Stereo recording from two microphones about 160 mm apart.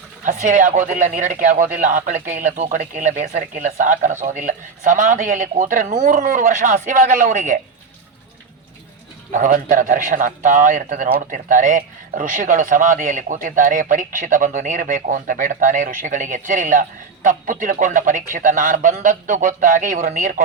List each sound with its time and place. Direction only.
0.3 s a man's voice: 50° right (ahead or behind)
9.3 s a man's voice: 55° right (ahead or behind)